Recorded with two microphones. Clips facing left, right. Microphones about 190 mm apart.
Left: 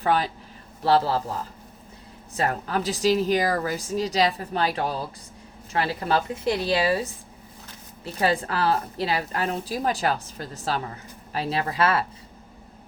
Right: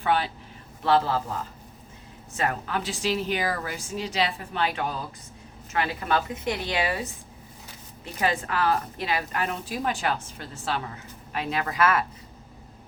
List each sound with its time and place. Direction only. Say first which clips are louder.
0.0 s a woman's voice: left 2 dB; 40° left (ahead or behind)
2.3 s a woman's voice: left 2 dB; 35° left (ahead or behind)